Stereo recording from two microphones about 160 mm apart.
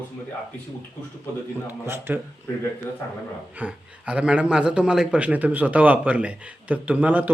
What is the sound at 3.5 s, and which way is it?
A man's voice, 10° right (ahead or behind).